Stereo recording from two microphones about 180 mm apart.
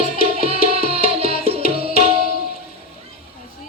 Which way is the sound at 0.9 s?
35° right (ahead or behind).